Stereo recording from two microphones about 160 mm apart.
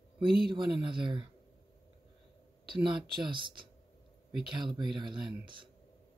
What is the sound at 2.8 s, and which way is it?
Speech, 30° right (ahead or behind).